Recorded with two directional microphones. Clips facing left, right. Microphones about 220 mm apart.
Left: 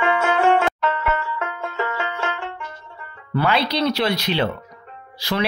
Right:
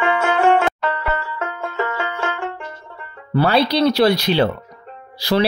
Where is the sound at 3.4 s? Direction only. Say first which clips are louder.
Right 5 dB; 40° right (ahead or behind).